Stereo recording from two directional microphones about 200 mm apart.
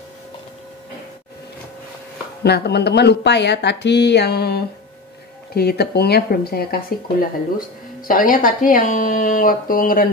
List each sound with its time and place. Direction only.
2.4 s speech: 55° left (ahead or behind)